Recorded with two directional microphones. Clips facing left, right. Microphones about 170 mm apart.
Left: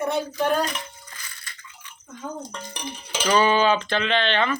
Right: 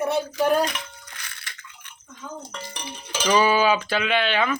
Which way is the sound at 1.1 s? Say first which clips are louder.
Right 1 dB; 70° right (ahead or behind).